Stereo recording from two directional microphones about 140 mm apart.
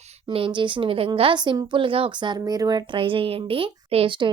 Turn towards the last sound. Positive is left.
turn(degrees=-35)  # may be behind; listen again after turning